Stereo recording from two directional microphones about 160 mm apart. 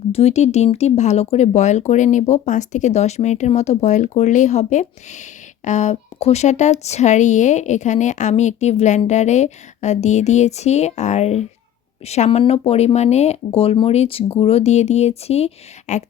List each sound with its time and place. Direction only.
0.1 s speech: 40° left (ahead or behind)